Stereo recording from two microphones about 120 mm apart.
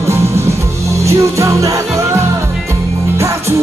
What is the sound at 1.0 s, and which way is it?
Music, 25° right (ahead or behind).